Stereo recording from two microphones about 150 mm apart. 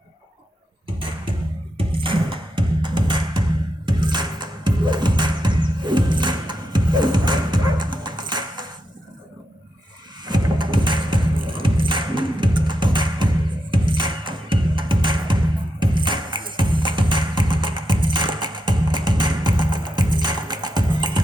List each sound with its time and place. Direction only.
0.9 s music: 35° right (ahead or behind)
10.2 s music: 30° right (ahead or behind)